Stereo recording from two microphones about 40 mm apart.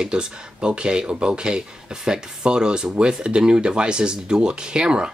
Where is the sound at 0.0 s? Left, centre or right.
Right.